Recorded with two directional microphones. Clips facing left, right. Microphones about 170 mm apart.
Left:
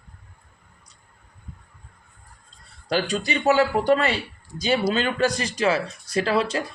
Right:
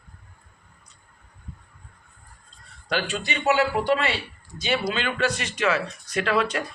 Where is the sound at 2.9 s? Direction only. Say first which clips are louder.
Left 4 dB; 35° left (ahead or behind).